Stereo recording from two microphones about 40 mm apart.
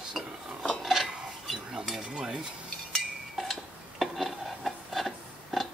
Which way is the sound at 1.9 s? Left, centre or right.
Centre.